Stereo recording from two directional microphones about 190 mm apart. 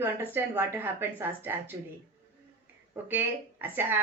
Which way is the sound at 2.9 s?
10° right (ahead or behind).